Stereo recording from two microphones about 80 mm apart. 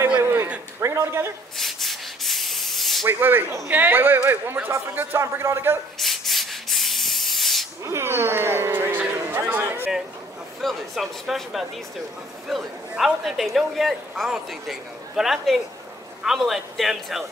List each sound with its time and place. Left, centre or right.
0.2 s a sound: right
1.6 s rub: centre
3.1 s a man's voice: right
5.9 s rub: centre
7.8 s speech: right
10.6 s a woman's voice: centre